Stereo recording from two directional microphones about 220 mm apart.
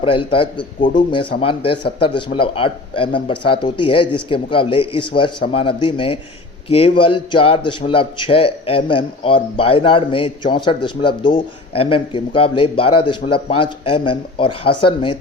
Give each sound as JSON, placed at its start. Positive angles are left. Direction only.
{"t": 0.0, "sound": "a man's voice", "side_deg": 25}